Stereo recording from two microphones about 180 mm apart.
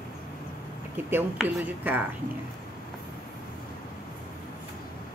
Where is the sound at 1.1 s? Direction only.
5° right (ahead or behind).